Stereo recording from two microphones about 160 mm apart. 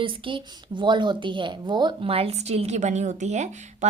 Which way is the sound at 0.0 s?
30° right (ahead or behind).